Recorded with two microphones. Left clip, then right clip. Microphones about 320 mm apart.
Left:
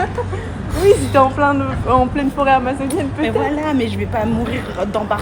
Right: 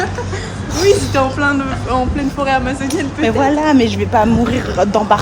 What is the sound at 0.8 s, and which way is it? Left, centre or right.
A woman's voice, centre.